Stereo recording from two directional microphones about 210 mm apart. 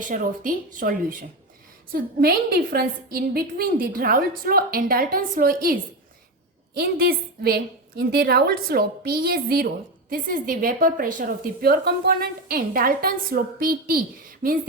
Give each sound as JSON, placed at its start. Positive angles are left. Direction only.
{"t": 0.1, "sound": "a woman's voice", "side_deg": -40}